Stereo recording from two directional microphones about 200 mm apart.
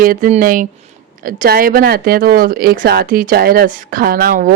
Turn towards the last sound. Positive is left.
turn(degrees=-45)  # may be behind; listen again after turning